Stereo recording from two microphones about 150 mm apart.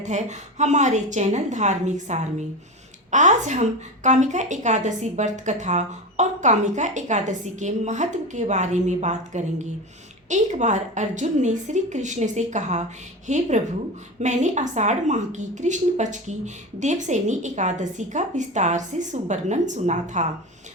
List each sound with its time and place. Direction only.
0.0 s a woman's voice: 50° right (ahead or behind)